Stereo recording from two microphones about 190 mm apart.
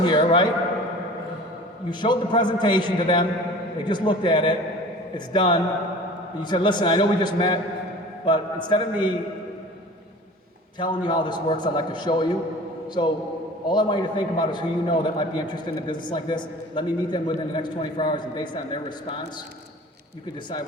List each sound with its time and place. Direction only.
0.0 s a man's voice: 25° left (ahead or behind)
1.9 s a man's voice: 25° left (ahead or behind)
10.8 s a man's voice: 25° left (ahead or behind)
13.7 s a man's voice: 25° left (ahead or behind)